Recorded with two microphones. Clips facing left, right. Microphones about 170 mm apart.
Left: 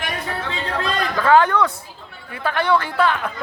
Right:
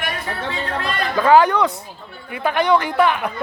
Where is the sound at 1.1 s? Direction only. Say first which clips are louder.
Right 2 dB; 15° right (ahead or behind).